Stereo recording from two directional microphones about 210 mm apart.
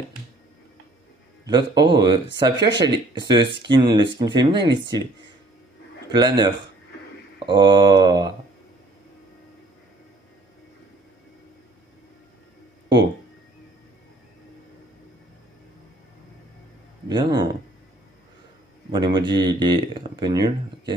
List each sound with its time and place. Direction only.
1.4 s speech: 20° right (ahead or behind)
6.1 s speech: 20° right (ahead or behind)
17.1 s speech: 20° right (ahead or behind)
18.9 s speech: 20° right (ahead or behind)